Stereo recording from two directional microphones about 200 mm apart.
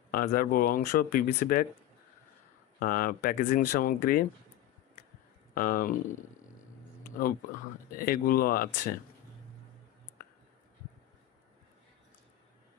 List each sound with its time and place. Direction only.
0.1 s speech: 45° left (ahead or behind)
2.8 s speech: 45° left (ahead or behind)
5.5 s speech: 45° left (ahead or behind)
7.0 s a sound: 45° left (ahead or behind)
8.0 s speech: 45° left (ahead or behind)